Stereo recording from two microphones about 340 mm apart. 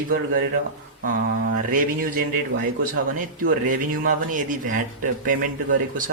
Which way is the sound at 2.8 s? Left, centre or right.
Right.